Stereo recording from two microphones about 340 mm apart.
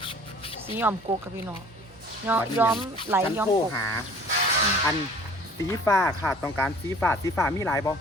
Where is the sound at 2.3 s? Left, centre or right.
Centre.